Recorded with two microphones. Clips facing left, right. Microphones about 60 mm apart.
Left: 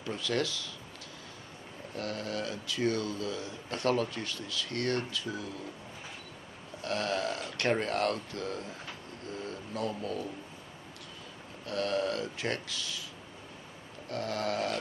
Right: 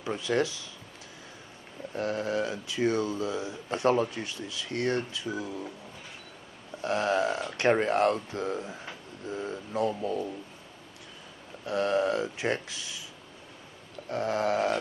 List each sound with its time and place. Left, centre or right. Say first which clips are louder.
0.0 s speech: right 4 dB; right
2.0 s speech: right 6 dB; right
6.8 s speech: right 6 dB; right
11.6 s speech: right 5 dB; right
14.0 s speech: right 5 dB; right